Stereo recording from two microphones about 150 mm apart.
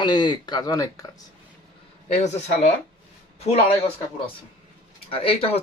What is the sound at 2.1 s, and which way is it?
Speech, 50° left (ahead or behind).